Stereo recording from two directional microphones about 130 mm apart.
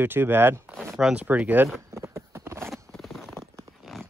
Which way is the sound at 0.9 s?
10° right (ahead or behind).